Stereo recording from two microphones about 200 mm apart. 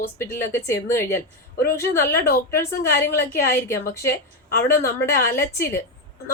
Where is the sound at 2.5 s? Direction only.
10° left (ahead or behind).